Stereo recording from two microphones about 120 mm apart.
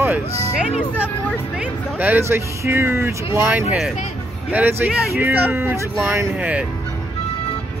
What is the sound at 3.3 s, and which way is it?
Music, 15° right (ahead or behind).